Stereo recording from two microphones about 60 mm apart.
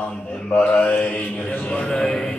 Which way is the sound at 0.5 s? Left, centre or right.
Left.